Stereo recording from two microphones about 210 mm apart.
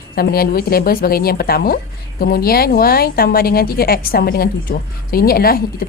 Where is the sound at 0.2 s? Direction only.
45° left (ahead or behind).